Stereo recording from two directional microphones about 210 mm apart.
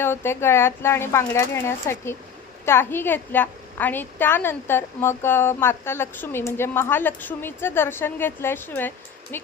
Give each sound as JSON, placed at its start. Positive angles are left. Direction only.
{"t": 0.0, "sound": "a woman's voice", "side_deg": 10}